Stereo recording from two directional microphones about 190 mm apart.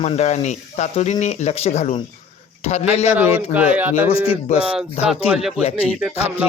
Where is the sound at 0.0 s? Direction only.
35° left (ahead or behind).